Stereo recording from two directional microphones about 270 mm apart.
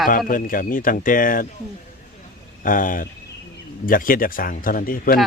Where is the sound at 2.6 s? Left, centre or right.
Left.